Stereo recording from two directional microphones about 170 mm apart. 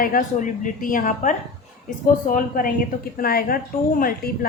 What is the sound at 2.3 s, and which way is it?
A woman's voice, 55° left (ahead or behind).